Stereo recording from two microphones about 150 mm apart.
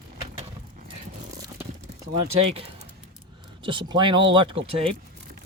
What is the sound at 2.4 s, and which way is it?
Speech, 40° right (ahead or behind).